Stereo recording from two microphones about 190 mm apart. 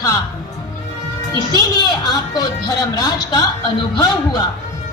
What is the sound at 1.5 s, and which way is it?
A woman's voice, 20° left (ahead or behind).